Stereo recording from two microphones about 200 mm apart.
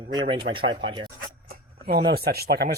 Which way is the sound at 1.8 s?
50° right (ahead or behind).